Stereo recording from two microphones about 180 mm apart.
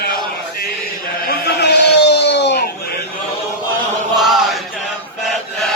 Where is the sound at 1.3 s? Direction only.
65° left (ahead or behind).